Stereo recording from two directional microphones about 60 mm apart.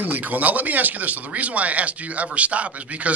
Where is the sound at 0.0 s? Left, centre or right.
Right.